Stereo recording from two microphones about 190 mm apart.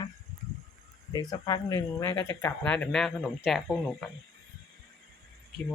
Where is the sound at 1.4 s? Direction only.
20° left (ahead or behind).